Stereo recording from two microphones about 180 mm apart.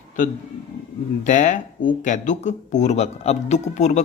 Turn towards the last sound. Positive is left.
turn(degrees=40)  # may be behind; listen again after turning